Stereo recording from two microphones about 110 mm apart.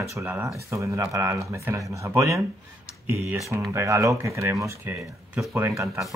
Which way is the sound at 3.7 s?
25° right (ahead or behind).